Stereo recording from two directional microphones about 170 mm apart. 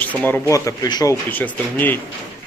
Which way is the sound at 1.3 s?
10° left (ahead or behind).